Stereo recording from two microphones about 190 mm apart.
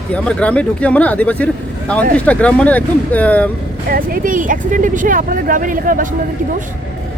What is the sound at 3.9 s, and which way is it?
Speech, 50° right (ahead or behind).